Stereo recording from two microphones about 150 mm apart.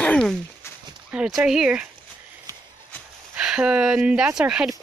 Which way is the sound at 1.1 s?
5° right (ahead or behind).